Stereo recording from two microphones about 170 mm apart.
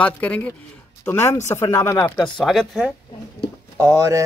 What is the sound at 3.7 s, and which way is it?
Speech, 15° right (ahead or behind).